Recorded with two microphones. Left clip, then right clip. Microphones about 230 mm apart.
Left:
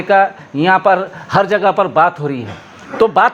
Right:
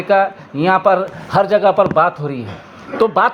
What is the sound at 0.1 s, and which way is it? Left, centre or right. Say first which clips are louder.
A man's voice: left 2 dB; left.